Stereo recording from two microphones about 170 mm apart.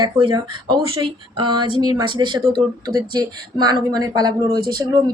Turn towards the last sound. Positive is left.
turn(degrees=-25)  # may be behind; listen again after turning